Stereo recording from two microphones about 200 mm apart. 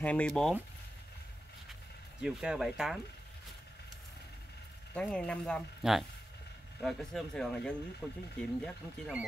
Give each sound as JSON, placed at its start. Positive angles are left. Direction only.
{"t": 0.0, "sound": "speech", "side_deg": 5}
{"t": 2.2, "sound": "speech", "side_deg": -5}
{"t": 4.9, "sound": "speech", "side_deg": 5}